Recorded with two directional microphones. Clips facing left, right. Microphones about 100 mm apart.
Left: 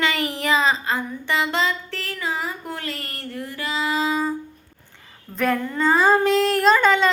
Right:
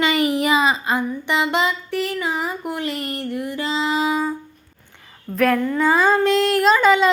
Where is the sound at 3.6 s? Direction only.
25° right (ahead or behind).